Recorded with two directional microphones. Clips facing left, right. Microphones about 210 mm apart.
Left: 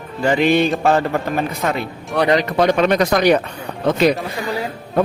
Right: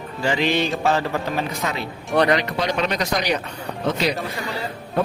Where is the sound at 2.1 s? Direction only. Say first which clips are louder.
Even; 5° right (ahead or behind).